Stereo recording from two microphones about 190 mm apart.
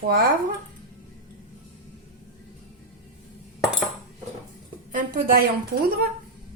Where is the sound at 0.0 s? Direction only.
50° right (ahead or behind).